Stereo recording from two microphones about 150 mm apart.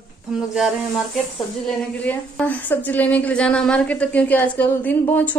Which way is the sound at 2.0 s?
10° left (ahead or behind).